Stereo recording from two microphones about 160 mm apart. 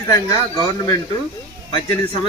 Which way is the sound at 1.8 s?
30° left (ahead or behind).